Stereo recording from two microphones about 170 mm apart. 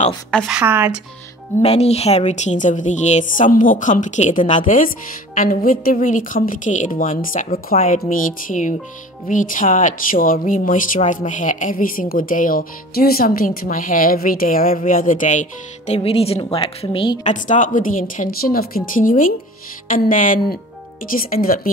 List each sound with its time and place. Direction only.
0.3 s a woman's voice: centre (ahead or behind)
1.6 s speech: 40° left (ahead or behind)
8.0 s speech: 50° left (ahead or behind)
15.9 s a woman's voice: 35° left (ahead or behind)
17.2 s speech: 45° left (ahead or behind)